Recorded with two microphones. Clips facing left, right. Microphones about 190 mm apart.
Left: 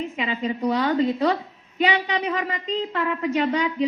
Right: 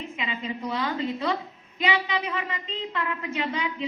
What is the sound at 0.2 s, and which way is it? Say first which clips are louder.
A woman's voice: left 6 dB; 35° left (ahead or behind).